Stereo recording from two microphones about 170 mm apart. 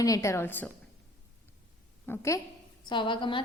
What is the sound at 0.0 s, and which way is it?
Speech, 20° left (ahead or behind).